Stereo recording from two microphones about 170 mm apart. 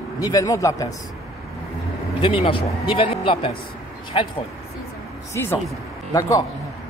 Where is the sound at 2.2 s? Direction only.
30° left (ahead or behind).